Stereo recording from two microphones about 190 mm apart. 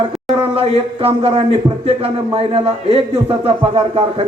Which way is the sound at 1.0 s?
30° right (ahead or behind).